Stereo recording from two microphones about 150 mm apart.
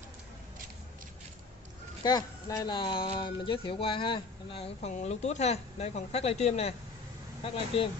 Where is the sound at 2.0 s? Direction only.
25° left (ahead or behind).